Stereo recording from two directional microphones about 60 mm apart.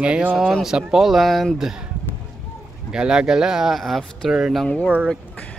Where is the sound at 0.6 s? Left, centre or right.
Centre.